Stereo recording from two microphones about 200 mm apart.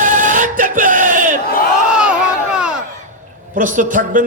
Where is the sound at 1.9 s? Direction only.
5° right (ahead or behind).